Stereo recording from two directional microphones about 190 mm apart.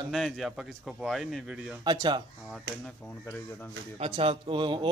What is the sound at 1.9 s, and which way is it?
Speech, 25° right (ahead or behind).